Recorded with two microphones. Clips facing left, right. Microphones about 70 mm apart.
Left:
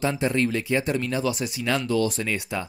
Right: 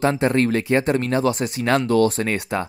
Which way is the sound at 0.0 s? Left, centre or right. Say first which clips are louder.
Right 5 dB; right.